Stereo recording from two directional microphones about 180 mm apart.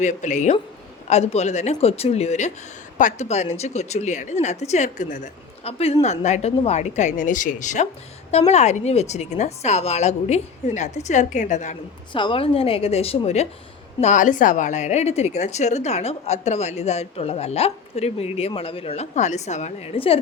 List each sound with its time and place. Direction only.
0.0 s a woman's voice: 40° left (ahead or behind)
12.1 s a woman's voice: 30° left (ahead or behind)